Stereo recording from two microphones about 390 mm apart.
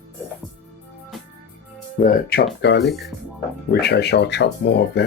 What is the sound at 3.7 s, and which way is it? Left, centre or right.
Speech, left.